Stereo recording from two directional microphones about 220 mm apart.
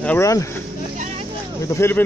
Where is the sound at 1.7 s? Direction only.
10° left (ahead or behind).